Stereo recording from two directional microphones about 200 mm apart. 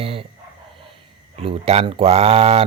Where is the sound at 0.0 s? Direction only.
25° right (ahead or behind).